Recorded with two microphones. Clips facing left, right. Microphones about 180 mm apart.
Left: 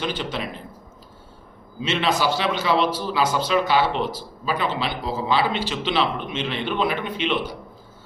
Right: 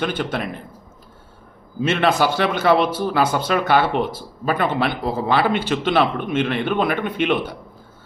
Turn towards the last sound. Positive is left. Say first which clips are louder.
# right 4 dB
turn(degrees=-55)  # may be behind; listen again after turning